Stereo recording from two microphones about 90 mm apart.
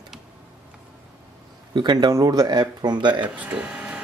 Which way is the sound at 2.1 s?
45° right (ahead or behind).